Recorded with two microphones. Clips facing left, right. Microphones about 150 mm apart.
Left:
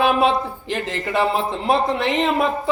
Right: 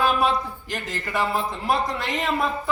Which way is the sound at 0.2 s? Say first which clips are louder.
Left 4 dB; 25° left (ahead or behind).